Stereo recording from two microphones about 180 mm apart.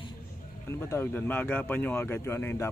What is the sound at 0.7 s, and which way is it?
Speech, 15° left (ahead or behind).